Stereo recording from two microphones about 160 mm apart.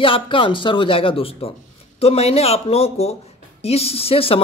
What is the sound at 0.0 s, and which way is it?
Speech, 35° left (ahead or behind).